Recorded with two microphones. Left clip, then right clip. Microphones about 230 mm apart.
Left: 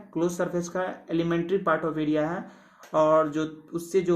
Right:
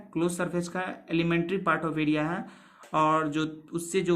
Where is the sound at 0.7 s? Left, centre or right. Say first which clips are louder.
Left 2 dB; right.